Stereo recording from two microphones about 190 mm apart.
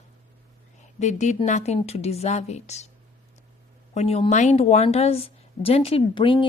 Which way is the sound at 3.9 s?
35° left (ahead or behind).